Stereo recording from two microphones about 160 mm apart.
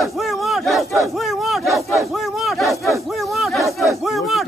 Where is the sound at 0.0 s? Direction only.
Centre (ahead or behind).